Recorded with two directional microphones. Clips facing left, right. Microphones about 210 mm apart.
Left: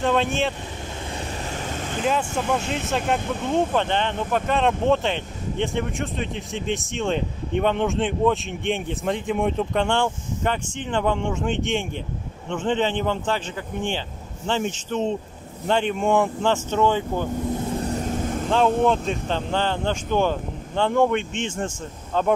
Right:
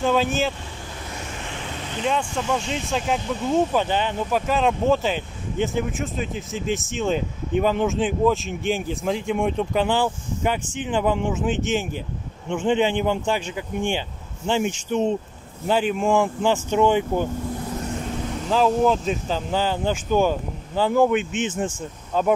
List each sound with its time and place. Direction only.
0.0 s speech: centre (ahead or behind)
1.6 s vehicle: 45° left (ahead or behind)
2.0 s speech: 5° left (ahead or behind)
16.4 s speech: 10° right (ahead or behind)
17.7 s vehicle: 40° left (ahead or behind)
18.5 s speech: centre (ahead or behind)